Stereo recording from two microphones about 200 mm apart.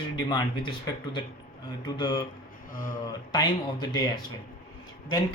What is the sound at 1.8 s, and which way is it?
Speech, 25° left (ahead or behind).